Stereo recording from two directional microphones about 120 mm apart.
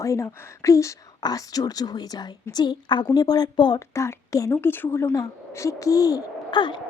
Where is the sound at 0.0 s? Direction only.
25° left (ahead or behind).